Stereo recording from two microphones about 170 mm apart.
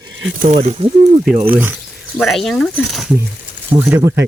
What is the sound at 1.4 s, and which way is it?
Speech, 10° right (ahead or behind).